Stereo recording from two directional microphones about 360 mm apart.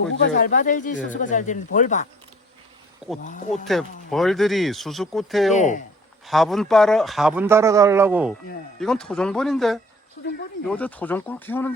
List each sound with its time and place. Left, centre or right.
0.1 s speech: left
3.2 s speech: left
4.1 s a man's voice: centre
5.5 s speech: centre
6.2 s a man's voice: centre
10.2 s speech: left
10.7 s a man's voice: centre